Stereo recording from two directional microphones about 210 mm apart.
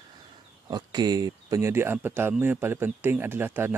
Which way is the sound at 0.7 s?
20° right (ahead or behind).